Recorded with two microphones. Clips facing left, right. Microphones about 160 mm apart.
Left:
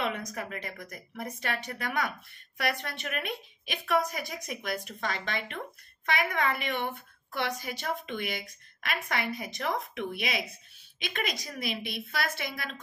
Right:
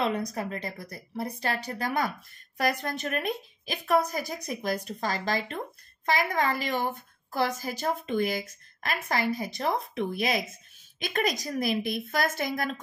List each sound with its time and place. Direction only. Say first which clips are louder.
0.0 s a woman's voice: right 5 dB; 35° right (ahead or behind)